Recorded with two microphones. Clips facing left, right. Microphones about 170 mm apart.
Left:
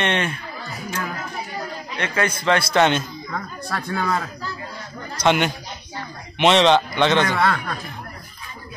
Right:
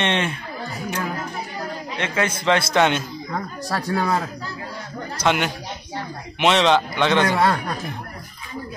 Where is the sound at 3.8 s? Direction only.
35° right (ahead or behind).